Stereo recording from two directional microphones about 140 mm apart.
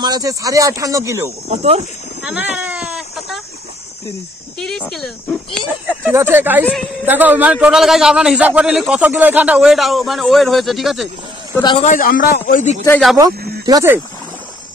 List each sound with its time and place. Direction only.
0.0 s speech: 25° right (ahead or behind)
1.5 s speech: 50° right (ahead or behind)
2.2 s baby cry: 10° right (ahead or behind)
4.6 s a man's voice: 5° left (ahead or behind)
5.9 s speech: 15° right (ahead or behind)
6.6 s a man's voice: 10° left (ahead or behind)
7.1 s a man's voice: 10° right (ahead or behind)
11.8 s a man's voice: 75° left (ahead or behind)
13.7 s speech: 25° right (ahead or behind)